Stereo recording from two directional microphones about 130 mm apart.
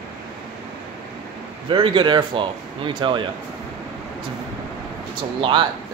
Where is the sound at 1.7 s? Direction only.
40° right (ahead or behind).